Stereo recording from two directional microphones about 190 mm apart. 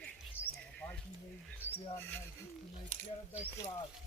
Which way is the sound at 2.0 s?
10° left (ahead or behind).